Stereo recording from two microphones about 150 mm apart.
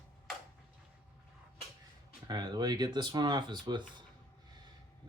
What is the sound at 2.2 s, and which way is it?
Speech, 25° right (ahead or behind).